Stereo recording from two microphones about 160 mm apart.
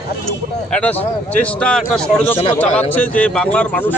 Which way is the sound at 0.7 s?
10° left (ahead or behind).